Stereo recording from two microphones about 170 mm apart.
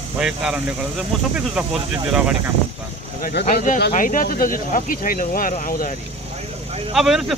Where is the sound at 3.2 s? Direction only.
70° left (ahead or behind).